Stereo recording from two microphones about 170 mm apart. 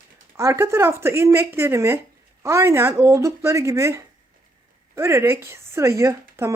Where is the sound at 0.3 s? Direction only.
15° right (ahead or behind).